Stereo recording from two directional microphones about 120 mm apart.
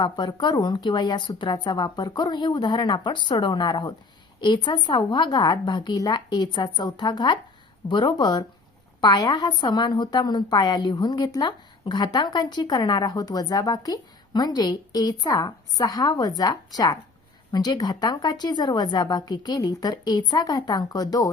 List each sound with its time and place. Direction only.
0.0 s a woman's voice: 40° left (ahead or behind)